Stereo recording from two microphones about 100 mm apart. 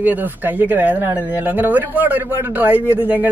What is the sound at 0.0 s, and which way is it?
A man's voice, 15° right (ahead or behind).